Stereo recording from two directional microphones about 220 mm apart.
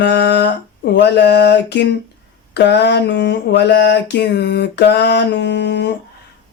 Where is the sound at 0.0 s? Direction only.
50° left (ahead or behind).